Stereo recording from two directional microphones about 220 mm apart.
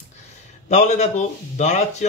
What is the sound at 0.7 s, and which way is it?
Speech, 30° left (ahead or behind).